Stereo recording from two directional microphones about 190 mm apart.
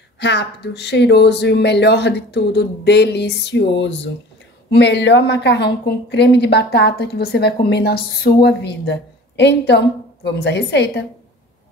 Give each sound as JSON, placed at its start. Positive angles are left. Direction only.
{"t": 0.2, "sound": "a woman's voice", "side_deg": 65}